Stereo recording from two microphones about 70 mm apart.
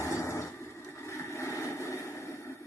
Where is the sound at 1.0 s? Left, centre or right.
Left.